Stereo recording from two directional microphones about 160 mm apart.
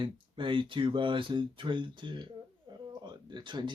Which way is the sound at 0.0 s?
30° right (ahead or behind).